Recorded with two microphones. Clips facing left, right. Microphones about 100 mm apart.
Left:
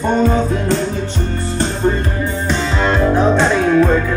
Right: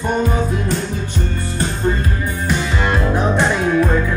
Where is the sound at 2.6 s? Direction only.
15° right (ahead or behind).